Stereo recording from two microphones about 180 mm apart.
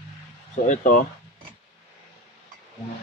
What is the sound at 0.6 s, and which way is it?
Speech, 45° left (ahead or behind).